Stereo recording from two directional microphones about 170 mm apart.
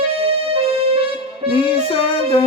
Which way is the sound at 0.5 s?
35° right (ahead or behind).